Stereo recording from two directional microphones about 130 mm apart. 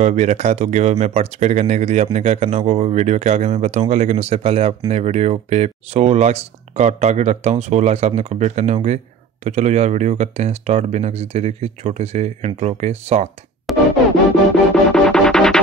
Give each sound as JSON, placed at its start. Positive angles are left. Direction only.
{"t": 0.0, "sound": "speech", "side_deg": -65}
{"t": 13.7, "sound": "music", "side_deg": 0}